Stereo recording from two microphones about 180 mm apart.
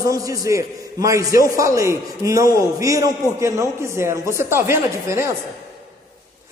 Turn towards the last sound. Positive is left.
turn(degrees=-15)  # may be behind; listen again after turning